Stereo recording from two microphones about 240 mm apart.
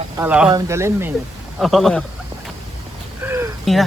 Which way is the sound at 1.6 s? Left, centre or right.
Centre.